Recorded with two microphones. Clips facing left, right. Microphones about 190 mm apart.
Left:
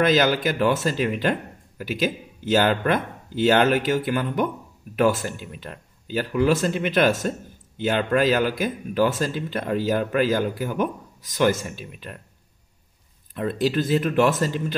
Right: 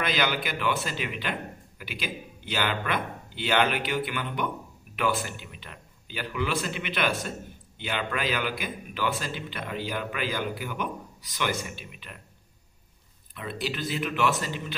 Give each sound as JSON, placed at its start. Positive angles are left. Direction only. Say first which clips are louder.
{"t": 0.0, "sound": "speech", "louder": "left 9 dB", "side_deg": 45}
{"t": 13.3, "sound": "speech", "louder": "left 10 dB", "side_deg": 45}